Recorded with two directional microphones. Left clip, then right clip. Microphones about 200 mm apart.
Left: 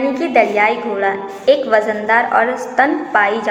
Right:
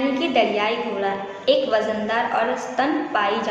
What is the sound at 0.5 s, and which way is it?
A woman's voice, 30° left (ahead or behind).